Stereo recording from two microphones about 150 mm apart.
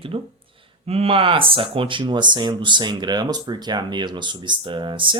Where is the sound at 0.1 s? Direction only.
35° right (ahead or behind).